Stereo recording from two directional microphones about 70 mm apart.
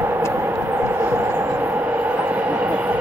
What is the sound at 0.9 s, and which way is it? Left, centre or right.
Train, right.